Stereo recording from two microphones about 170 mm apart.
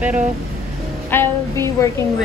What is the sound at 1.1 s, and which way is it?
Music, 15° left (ahead or behind).